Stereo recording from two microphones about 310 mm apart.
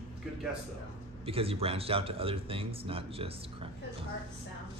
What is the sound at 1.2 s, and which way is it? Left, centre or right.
Speech, centre.